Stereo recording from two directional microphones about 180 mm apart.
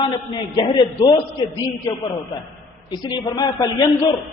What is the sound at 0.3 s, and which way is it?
Speech, 25° left (ahead or behind).